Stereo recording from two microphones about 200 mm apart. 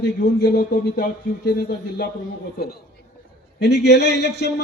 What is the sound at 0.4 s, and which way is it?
A man's voice, 55° left (ahead or behind).